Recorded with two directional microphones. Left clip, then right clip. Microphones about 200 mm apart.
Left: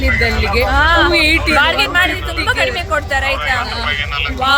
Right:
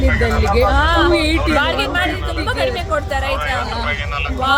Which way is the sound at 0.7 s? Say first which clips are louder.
Left 3 dB; 5° left (ahead or behind).